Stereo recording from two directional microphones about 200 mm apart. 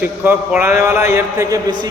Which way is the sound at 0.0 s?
10° right (ahead or behind).